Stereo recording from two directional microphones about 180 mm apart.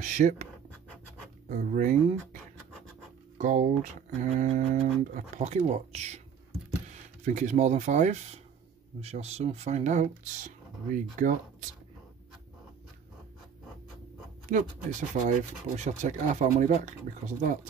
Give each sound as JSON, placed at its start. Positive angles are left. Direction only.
{"t": 0.0, "sound": "speech", "side_deg": -45}
{"t": 1.5, "sound": "speech", "side_deg": -45}
{"t": 3.3, "sound": "speech", "side_deg": -40}
{"t": 14.5, "sound": "speech", "side_deg": -45}